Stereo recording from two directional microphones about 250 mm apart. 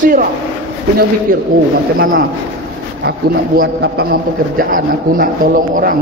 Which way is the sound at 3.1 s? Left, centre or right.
Right.